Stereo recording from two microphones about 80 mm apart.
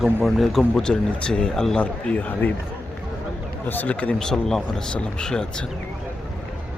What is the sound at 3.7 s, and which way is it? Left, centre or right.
Speech, left.